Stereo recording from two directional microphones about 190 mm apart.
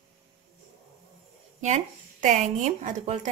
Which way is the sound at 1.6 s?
40° right (ahead or behind).